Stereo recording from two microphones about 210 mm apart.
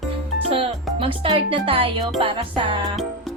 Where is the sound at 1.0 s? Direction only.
25° right (ahead or behind).